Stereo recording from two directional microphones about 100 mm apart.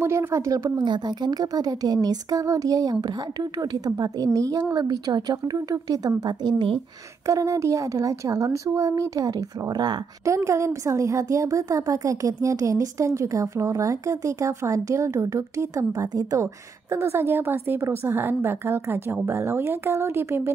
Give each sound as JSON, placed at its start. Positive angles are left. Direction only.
{"t": 0.0, "sound": "a woman's voice", "side_deg": -25}
{"t": 0.8, "sound": "a woman's voice", "side_deg": -45}
{"t": 10.2, "sound": "a woman's voice", "side_deg": -30}